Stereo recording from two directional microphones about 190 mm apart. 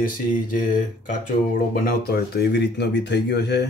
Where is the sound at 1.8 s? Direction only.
55° left (ahead or behind).